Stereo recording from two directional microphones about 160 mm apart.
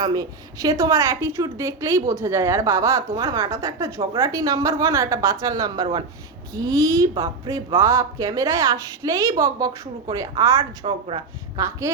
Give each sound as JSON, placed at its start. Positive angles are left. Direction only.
{"t": 0.0, "sound": "a woman's voice", "side_deg": -25}
{"t": 10.8, "sound": "speech", "side_deg": -35}
{"t": 11.5, "sound": "a woman's voice", "side_deg": -20}